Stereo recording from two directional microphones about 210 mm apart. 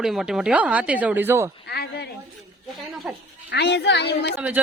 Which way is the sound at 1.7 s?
50° left (ahead or behind).